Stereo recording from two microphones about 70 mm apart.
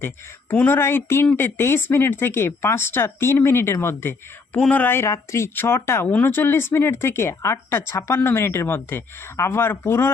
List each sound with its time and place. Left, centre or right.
0.7 s speech: left
5.0 s speech: left